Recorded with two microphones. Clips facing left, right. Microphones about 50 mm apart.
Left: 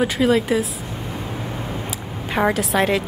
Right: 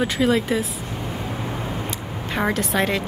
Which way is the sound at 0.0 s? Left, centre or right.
Centre.